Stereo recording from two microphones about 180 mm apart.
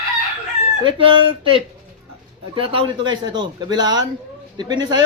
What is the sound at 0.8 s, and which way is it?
Speech, 30° right (ahead or behind).